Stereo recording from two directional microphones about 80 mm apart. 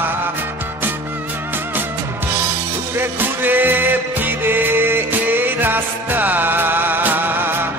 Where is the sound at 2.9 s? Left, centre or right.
Right.